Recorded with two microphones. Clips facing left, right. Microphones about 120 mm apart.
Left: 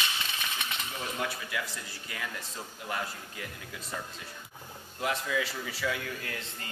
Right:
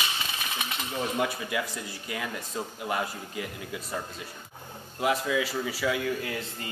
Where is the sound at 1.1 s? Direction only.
15° right (ahead or behind).